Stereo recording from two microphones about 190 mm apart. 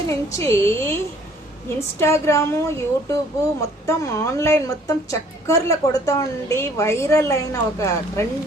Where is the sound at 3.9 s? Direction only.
15° left (ahead or behind).